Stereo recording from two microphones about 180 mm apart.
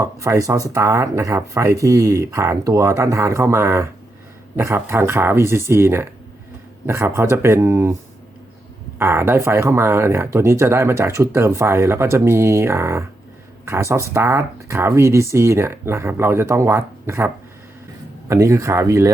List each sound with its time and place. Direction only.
0.0 s speech: 15° right (ahead or behind)
9.0 s speech: 15° right (ahead or behind)